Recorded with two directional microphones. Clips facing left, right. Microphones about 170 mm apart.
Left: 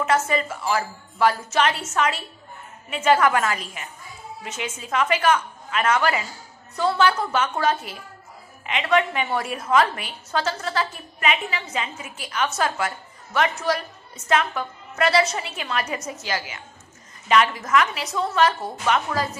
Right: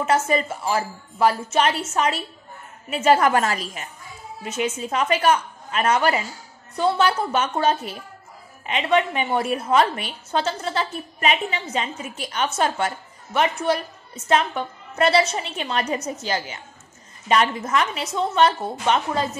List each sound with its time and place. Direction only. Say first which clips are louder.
0.0 s a woman's voice: right 1 dB; 30° right (ahead or behind)